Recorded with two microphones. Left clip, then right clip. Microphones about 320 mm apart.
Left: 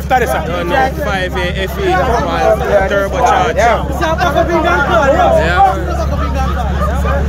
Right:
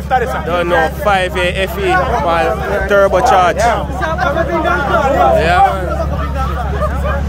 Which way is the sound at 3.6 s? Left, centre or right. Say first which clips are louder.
Left 2 dB; left.